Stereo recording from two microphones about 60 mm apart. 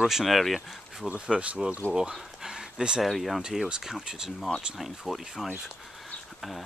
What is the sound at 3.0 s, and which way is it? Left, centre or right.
Speech, centre.